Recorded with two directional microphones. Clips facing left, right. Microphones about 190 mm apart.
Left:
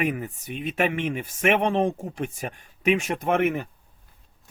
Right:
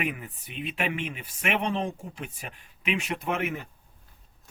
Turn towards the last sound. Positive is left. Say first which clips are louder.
# left 7 dB
turn(degrees=55)  # may be behind; listen again after turning